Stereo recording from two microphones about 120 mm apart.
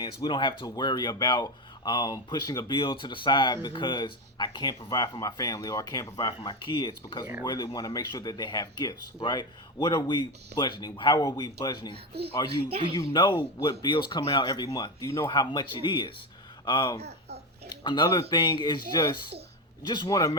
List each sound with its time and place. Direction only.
0.0 s speech: 40° left (ahead or behind)
12.5 s speech: 45° right (ahead or behind)
13.0 s speech: 40° left (ahead or behind); by 15.3 s 25° left (ahead or behind)
15.3 s a man's voice: 40° left (ahead or behind)